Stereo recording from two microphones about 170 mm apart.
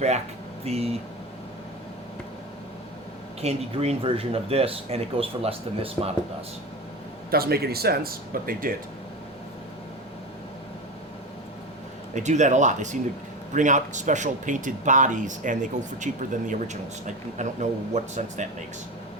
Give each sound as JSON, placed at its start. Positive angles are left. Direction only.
{"t": 0.6, "sound": "speech", "side_deg": -35}
{"t": 3.4, "sound": "speech", "side_deg": -35}
{"t": 7.3, "sound": "speech", "side_deg": -65}
{"t": 12.1, "sound": "speech", "side_deg": -45}